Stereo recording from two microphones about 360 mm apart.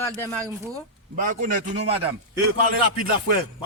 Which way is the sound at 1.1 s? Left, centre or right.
Right.